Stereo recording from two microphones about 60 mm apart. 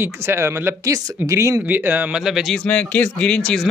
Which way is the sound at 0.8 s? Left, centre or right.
Right.